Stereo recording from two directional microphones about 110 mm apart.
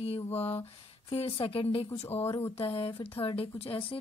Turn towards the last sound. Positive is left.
turn(degrees=55)  # may be behind; listen again after turning